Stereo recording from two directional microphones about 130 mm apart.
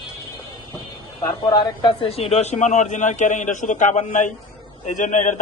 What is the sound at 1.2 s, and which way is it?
A man's voice, 35° left (ahead or behind).